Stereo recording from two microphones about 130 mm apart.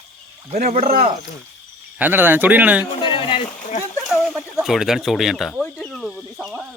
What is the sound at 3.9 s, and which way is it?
Speech, 5° right (ahead or behind).